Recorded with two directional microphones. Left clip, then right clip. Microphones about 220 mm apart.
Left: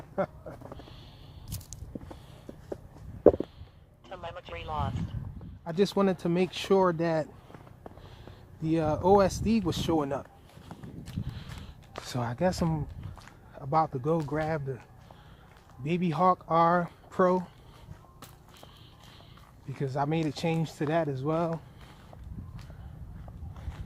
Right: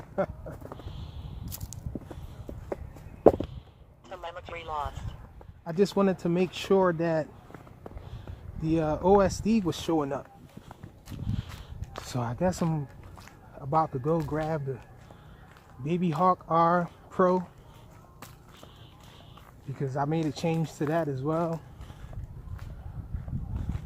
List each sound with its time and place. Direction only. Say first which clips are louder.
1.5 s biting: even; 15° left (ahead or behind)
4.1 s a sound: right 1 dB; 10° left (ahead or behind)
5.6 s speech: right 1 dB; 5° left (ahead or behind)
8.6 s speech: right 1 dB; centre (ahead or behind)
11.9 s speech: even; 10° left (ahead or behind)
15.8 s speech: even; 10° left (ahead or behind)
19.8 s speech: even; 10° left (ahead or behind)
23.7 s run: right 6 dB; 5° left (ahead or behind)